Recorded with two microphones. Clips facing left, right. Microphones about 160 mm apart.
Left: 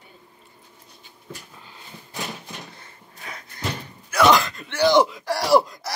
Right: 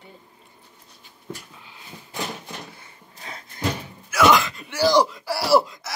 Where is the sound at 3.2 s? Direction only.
30° right (ahead or behind).